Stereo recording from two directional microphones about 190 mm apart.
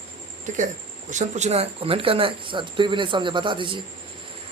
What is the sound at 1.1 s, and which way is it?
Speech, 40° right (ahead or behind).